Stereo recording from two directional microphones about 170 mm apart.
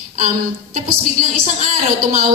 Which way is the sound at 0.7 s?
50° right (ahead or behind).